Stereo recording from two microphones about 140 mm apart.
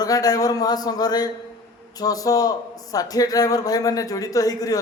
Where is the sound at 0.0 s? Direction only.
25° left (ahead or behind).